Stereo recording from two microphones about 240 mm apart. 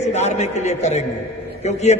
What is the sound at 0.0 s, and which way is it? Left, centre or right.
A man's voice, left.